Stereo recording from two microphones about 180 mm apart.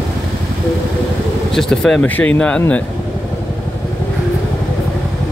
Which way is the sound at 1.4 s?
5° left (ahead or behind).